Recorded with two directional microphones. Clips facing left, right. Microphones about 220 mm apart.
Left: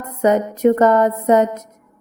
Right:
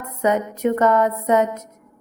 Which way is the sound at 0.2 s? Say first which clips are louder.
Left 5 dB; 35° left (ahead or behind).